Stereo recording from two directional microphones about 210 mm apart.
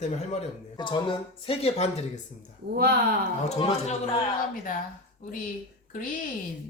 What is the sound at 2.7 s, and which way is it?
Speech, 50° right (ahead or behind).